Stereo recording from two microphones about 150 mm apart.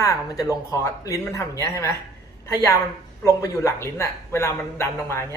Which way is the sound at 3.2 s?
20° left (ahead or behind).